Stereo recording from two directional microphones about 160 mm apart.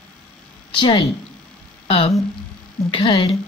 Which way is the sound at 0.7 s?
30° left (ahead or behind).